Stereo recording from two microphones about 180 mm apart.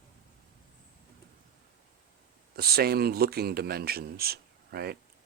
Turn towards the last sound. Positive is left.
turn(degrees=-60)  # may be behind; listen again after turning